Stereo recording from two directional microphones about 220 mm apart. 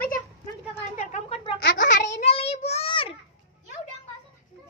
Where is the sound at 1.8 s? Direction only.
30° left (ahead or behind).